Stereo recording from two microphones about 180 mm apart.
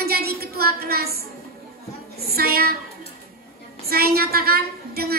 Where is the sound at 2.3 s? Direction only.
60° right (ahead or behind).